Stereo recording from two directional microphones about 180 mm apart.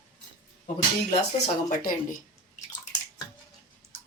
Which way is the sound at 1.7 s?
50° left (ahead or behind).